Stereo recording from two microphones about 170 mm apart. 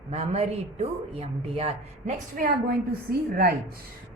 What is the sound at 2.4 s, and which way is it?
A woman's voice, 60° right (ahead or behind).